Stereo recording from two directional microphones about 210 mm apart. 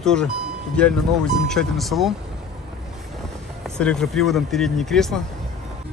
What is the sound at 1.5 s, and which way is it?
Speech, centre (ahead or behind).